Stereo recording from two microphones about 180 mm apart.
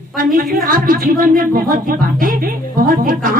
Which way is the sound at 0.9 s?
50° right (ahead or behind).